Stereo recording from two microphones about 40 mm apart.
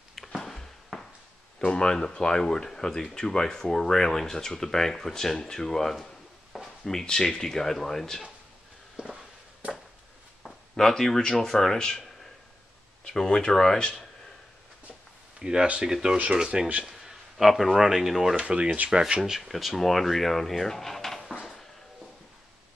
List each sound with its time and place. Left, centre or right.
0.9 s a sound: centre
1.6 s speech: left
9.0 s a sound: right
10.8 s speech: centre
13.0 s speech: centre
15.3 s a sound: centre
15.8 s speech: centre
16.8 s speech: centre
18.3 s speech: right
19.4 s speech: centre